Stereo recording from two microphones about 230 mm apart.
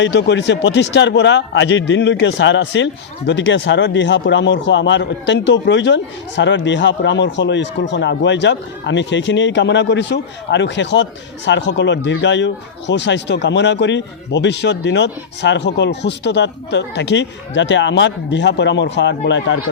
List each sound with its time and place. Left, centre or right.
0.0 s a man's voice: left